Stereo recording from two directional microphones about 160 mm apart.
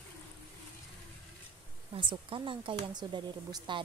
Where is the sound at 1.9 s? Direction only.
30° right (ahead or behind).